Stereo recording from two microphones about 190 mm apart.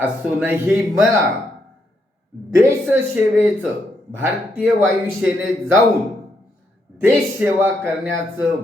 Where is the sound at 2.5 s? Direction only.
10° right (ahead or behind).